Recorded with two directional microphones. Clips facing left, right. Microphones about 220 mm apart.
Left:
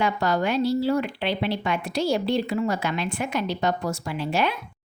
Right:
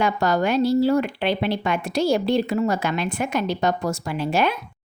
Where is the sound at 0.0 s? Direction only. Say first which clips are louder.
Right 3 dB; 45° right (ahead or behind).